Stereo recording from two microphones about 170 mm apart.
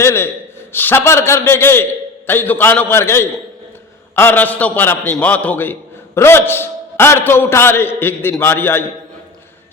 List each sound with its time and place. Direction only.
0.0 s a man's voice: 15° left (ahead or behind)